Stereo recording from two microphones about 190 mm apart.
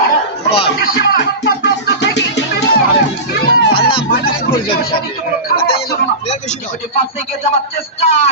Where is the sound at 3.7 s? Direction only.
25° left (ahead or behind).